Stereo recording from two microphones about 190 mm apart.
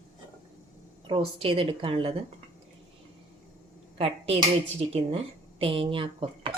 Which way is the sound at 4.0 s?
30° right (ahead or behind).